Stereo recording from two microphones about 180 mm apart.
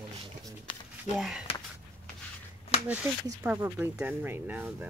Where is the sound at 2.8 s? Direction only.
10° right (ahead or behind).